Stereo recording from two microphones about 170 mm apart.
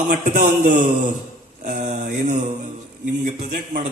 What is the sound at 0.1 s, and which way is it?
A man's voice, 50° right (ahead or behind).